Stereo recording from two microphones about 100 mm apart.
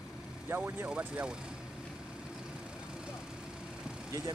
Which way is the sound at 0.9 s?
10° right (ahead or behind).